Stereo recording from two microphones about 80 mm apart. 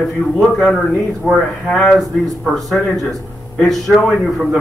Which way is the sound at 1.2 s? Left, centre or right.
Centre.